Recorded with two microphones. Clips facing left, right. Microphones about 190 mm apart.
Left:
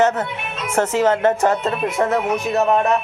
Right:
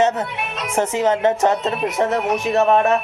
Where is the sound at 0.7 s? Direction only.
15° right (ahead or behind).